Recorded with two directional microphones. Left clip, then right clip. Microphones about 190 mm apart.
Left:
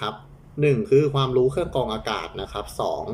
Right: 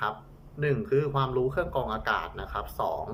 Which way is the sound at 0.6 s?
20° left (ahead or behind).